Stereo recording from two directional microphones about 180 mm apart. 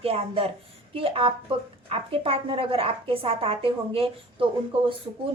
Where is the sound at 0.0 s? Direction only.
35° right (ahead or behind).